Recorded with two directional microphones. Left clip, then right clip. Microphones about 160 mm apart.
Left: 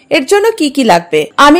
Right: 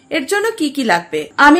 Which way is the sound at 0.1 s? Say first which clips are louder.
Left 8 dB; 45° left (ahead or behind).